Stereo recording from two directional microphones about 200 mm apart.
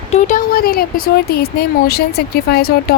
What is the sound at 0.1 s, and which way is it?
Speech, 40° left (ahead or behind).